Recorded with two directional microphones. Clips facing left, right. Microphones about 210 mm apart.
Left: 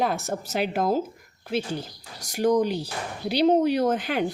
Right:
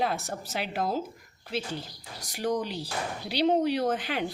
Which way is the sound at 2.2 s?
45° left (ahead or behind).